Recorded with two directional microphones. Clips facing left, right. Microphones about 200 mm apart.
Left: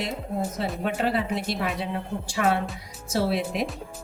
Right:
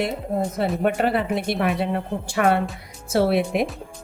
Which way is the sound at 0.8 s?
55° right (ahead or behind).